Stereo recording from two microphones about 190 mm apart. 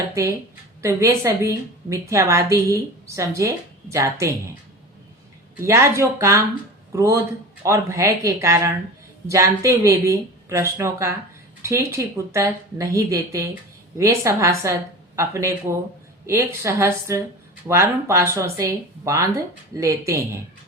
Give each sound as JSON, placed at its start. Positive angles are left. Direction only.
{"t": 0.1, "sound": "a woman's voice", "side_deg": -15}
{"t": 5.5, "sound": "a woman's voice", "side_deg": -15}